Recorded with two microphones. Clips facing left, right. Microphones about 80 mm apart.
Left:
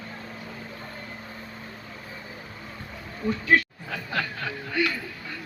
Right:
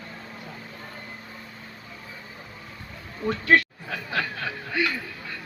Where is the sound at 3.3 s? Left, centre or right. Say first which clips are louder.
Right 2 dB; right.